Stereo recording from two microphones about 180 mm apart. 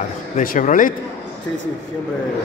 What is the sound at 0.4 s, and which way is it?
Speech, 45° left (ahead or behind).